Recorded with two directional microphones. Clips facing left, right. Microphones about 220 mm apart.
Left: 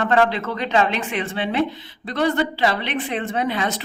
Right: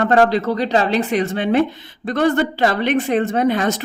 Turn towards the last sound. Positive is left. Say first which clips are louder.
# right 6 dB
turn(degrees=-45)  # may be behind; listen again after turning